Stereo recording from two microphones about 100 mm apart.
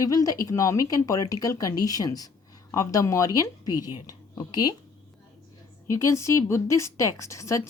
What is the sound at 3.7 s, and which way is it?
Speech, 25° right (ahead or behind).